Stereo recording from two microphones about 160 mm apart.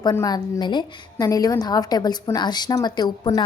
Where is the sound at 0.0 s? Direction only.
25° left (ahead or behind).